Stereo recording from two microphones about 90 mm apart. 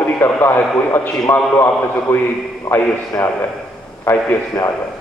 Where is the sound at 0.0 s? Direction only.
25° left (ahead or behind).